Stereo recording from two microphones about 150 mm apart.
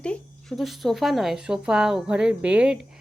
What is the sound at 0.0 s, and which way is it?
A woman's voice, 5° left (ahead or behind).